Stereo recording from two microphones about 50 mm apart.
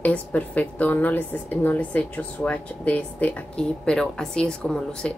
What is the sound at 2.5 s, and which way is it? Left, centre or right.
Speech, left.